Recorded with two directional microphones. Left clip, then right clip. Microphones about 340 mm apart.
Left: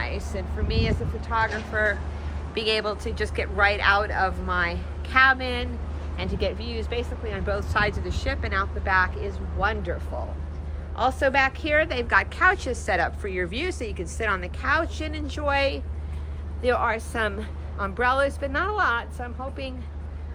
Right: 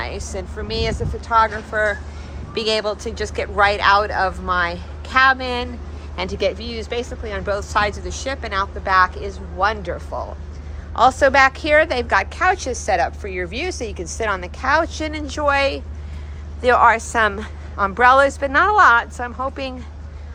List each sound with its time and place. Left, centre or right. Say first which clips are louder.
0.0 s a woman's voice: right 4 dB; centre
10.9 s a woman's voice: right 9 dB; centre